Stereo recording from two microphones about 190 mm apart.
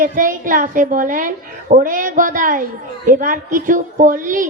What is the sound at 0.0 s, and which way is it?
A woman's voice, 45° right (ahead or behind).